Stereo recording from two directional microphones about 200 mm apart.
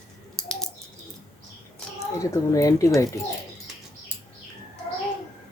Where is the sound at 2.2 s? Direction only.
15° left (ahead or behind).